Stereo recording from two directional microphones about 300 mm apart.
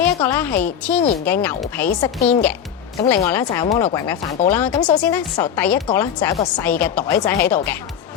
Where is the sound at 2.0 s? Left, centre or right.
Left.